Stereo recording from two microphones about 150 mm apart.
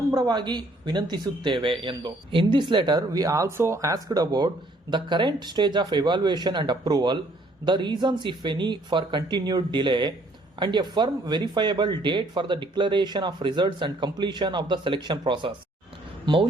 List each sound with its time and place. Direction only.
0.1 s speech: 30° right (ahead or behind)